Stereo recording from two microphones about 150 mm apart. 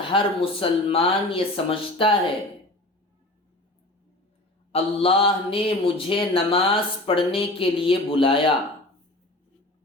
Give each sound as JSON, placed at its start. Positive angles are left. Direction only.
{"t": 0.1, "sound": "speech", "side_deg": 35}
{"t": 4.7, "sound": "speech", "side_deg": 40}